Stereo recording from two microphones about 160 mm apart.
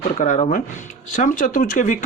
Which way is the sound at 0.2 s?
50° left (ahead or behind).